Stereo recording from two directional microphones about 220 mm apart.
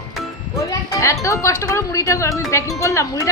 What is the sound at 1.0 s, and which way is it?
Speech, 15° left (ahead or behind).